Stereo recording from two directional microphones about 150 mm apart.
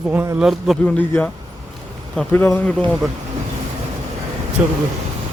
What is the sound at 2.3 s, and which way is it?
Speech, 15° left (ahead or behind).